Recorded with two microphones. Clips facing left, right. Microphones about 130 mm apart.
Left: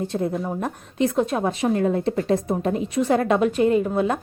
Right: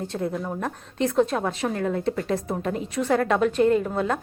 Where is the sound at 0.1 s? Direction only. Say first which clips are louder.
Left 3 dB; 25° left (ahead or behind).